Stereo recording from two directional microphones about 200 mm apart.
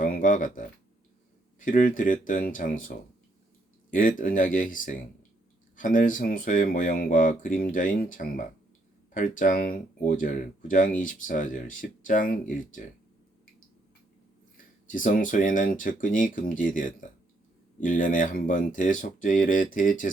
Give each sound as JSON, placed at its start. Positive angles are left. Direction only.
{"t": 0.0, "sound": "speech", "side_deg": 40}
{"t": 3.9, "sound": "speech", "side_deg": 40}
{"t": 14.5, "sound": "speech", "side_deg": 40}